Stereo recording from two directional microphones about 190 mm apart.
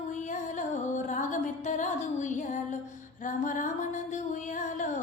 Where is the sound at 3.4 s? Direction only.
40° left (ahead or behind).